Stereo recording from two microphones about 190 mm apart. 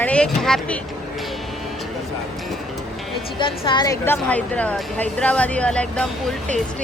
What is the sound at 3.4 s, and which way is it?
Speech, 25° left (ahead or behind).